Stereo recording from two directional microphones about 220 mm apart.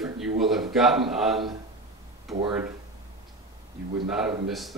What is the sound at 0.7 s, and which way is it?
A woman's voice, centre (ahead or behind).